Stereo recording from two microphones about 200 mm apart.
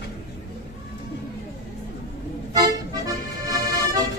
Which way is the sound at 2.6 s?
15° right (ahead or behind).